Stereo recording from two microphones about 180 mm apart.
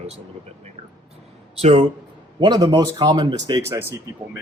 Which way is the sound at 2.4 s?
20° right (ahead or behind).